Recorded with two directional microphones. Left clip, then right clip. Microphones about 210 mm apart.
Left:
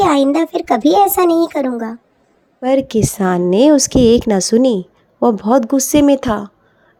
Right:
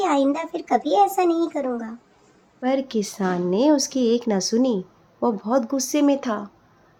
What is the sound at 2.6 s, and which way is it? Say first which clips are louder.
Speech: left 9 dB; 35° left (ahead or behind).